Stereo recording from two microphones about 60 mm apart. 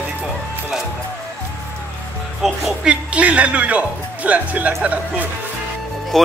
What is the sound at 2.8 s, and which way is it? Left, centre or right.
Speech, centre.